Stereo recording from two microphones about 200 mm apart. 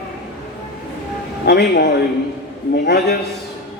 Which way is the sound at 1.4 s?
55° left (ahead or behind).